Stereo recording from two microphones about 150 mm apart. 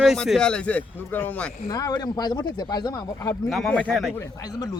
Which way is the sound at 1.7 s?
25° left (ahead or behind).